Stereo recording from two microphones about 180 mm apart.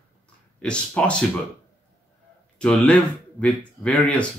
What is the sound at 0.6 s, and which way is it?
Speech, 5° left (ahead or behind).